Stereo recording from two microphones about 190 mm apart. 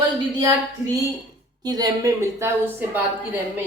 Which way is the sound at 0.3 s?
20° right (ahead or behind).